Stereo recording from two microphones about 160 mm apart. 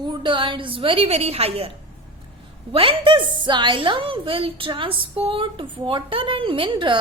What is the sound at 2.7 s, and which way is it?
A woman's voice, 35° right (ahead or behind).